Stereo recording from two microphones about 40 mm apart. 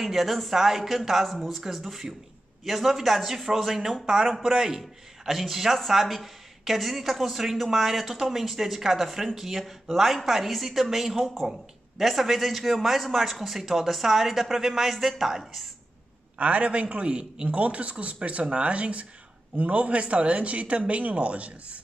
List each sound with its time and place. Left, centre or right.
0.0 s speech: centre
16.3 s a man's voice: right